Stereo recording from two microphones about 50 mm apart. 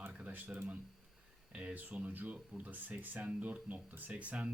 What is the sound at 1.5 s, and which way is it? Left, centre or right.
Speech, right.